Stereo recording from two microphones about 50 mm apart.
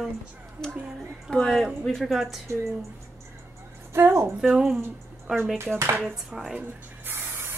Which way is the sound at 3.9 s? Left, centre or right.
Right.